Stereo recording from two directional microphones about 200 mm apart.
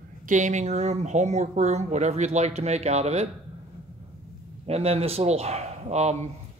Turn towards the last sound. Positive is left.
turn(degrees=-35)  # may be behind; listen again after turning